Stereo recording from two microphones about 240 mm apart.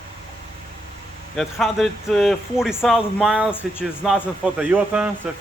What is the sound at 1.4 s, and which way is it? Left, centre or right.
Speech, centre.